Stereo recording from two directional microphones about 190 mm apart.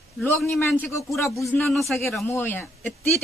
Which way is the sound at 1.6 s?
Centre (ahead or behind).